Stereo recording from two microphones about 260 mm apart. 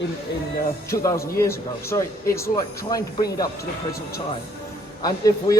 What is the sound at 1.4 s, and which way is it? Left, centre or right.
A man's voice, centre.